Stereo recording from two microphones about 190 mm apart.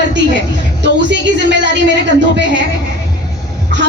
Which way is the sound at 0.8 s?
70° right (ahead or behind).